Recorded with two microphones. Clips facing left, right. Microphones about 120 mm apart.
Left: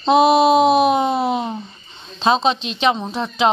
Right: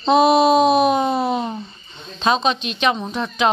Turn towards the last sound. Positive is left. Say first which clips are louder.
# left 1 dB
turn(degrees=25)  # may be behind; listen again after turning